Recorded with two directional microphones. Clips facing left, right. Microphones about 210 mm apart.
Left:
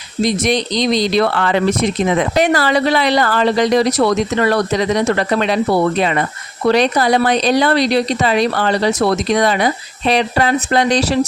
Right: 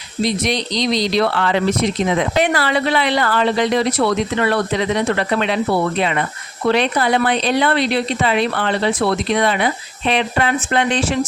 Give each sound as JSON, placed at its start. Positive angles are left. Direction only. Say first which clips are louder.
{"t": 0.2, "sound": "speech", "louder": "left 3 dB", "side_deg": 45}